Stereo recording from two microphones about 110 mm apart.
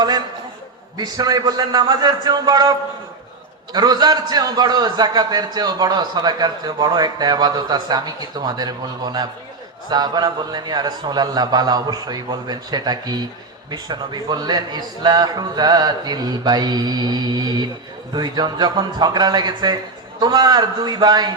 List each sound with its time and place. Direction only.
0.9 s a man's voice: 40° right (ahead or behind)